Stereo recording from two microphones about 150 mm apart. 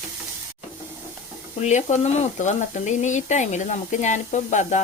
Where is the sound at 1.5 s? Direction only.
50° left (ahead or behind).